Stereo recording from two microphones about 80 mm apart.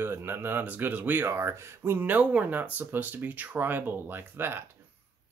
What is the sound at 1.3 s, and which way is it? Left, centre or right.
Speech, right.